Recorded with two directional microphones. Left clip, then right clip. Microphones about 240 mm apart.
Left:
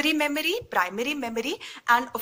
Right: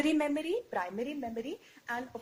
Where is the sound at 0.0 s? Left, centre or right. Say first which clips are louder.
Left 6 dB; left.